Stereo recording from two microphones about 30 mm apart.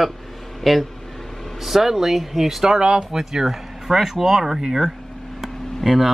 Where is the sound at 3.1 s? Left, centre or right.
Centre.